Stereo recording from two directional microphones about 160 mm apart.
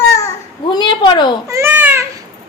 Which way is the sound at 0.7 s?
30° left (ahead or behind).